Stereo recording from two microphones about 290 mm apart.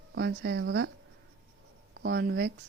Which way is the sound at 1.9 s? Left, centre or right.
Right.